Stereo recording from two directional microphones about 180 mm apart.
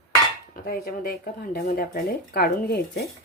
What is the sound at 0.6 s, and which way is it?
Speech, 55° left (ahead or behind).